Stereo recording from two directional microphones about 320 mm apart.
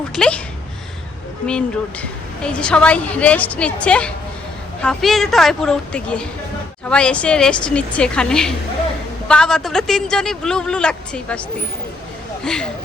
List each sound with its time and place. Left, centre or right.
0.2 s a woman's voice: centre
1.5 s a woman's voice: centre